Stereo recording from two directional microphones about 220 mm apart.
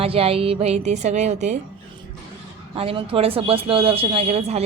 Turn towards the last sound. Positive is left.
turn(degrees=-30)  # may be behind; listen again after turning